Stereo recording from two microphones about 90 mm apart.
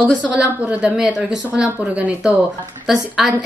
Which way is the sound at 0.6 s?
15° right (ahead or behind).